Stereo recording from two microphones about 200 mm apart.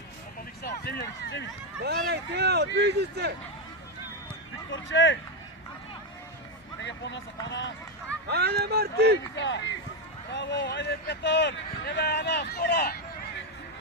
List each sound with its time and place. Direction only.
0.6 s speech: 55° left (ahead or behind)
1.8 s speech: 55° right (ahead or behind)
4.7 s speech: 70° left (ahead or behind)
6.8 s speech: 60° left (ahead or behind)
8.3 s speech: 55° right (ahead or behind)
9.3 s speech: 65° left (ahead or behind)